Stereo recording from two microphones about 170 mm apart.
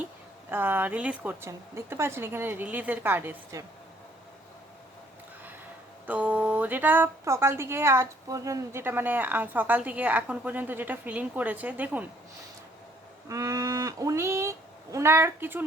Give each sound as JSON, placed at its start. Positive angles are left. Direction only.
{"t": 0.5, "sound": "a woman's voice", "side_deg": -10}
{"t": 6.1, "sound": "a woman's voice", "side_deg": -10}
{"t": 13.2, "sound": "livestock", "side_deg": -20}
{"t": 14.9, "sound": "a woman's voice", "side_deg": -15}